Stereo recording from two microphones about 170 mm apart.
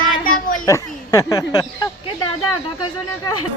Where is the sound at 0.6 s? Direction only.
20° left (ahead or behind).